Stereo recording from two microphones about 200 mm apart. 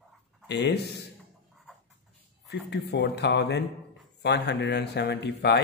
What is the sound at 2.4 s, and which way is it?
Speech, 55° left (ahead or behind).